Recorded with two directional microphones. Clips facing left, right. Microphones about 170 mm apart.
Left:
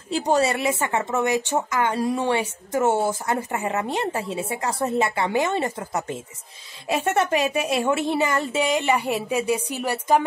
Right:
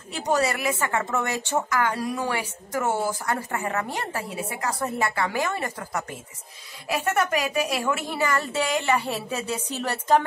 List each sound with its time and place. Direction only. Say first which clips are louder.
0.1 s speech: left 3 dB; 30° left (ahead or behind); by 10.2 s 10° left (ahead or behind)